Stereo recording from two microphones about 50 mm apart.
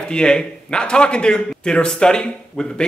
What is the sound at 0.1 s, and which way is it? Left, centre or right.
A man's voice, centre.